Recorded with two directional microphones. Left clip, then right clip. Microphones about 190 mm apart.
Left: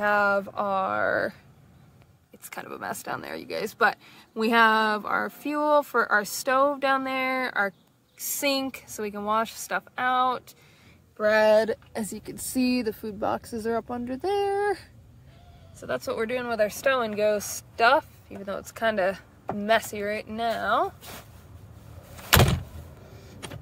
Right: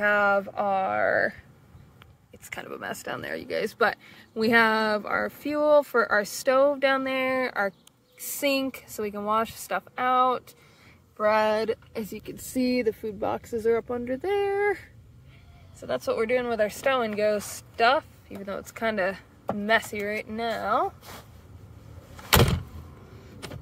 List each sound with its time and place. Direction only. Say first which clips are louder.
0.0 s speech: right 1 dB; 10° left (ahead or behind)
2.5 s speech: even; 10° left (ahead or behind); by 13.6 s 35° left (ahead or behind)
13.8 s speech: right 1 dB; 20° left (ahead or behind)
15.8 s speech: right 2 dB; 10° left (ahead or behind)
22.3 s door: left 1 dB; centre (ahead or behind)